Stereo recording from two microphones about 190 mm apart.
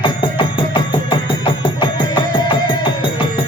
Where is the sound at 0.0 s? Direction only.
25° left (ahead or behind).